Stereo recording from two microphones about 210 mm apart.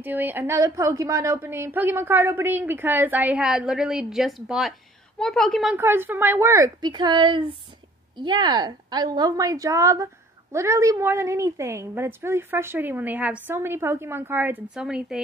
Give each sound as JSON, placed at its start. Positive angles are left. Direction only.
{"t": 0.0, "sound": "a woman's voice", "side_deg": -10}
{"t": 5.8, "sound": "a woman's voice", "side_deg": -10}